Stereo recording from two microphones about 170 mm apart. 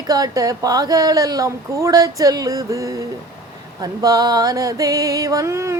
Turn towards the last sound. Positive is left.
turn(degrees=-15)  # may be behind; listen again after turning